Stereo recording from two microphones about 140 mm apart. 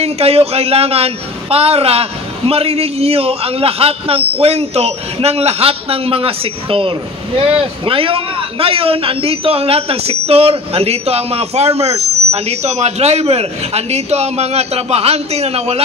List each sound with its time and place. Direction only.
0.0 s a man's voice: 45° right (ahead or behind)